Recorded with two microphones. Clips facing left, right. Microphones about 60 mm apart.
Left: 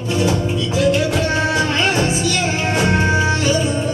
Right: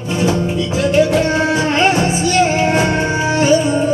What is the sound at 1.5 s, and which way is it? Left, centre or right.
Music, right.